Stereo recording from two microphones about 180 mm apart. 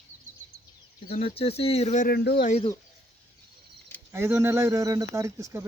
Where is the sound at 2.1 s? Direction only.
65° left (ahead or behind).